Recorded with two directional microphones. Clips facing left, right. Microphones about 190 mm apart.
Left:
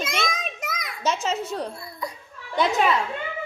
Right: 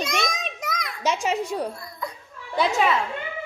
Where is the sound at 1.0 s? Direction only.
15° right (ahead or behind).